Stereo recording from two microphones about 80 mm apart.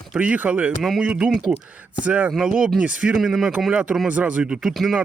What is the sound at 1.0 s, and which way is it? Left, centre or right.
Speech, centre.